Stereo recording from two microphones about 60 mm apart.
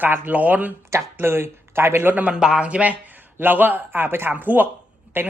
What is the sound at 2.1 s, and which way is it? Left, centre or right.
Speech, right.